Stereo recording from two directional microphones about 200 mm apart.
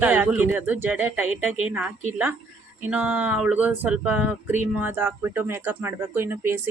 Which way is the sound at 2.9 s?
5° right (ahead or behind).